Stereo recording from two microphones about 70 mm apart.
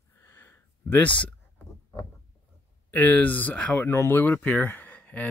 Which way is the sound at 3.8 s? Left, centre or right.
Left.